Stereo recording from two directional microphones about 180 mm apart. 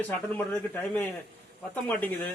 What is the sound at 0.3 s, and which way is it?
Speech, 10° left (ahead or behind).